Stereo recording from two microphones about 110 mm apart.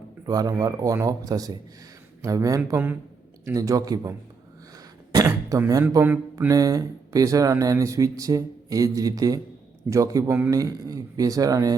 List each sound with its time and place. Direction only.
0.3 s speech: 35° right (ahead or behind)
3.4 s speech: 30° right (ahead or behind)
5.1 s speech: 30° right (ahead or behind)